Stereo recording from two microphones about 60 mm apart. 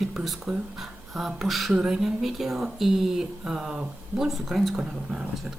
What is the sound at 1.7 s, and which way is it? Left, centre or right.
Speech, centre.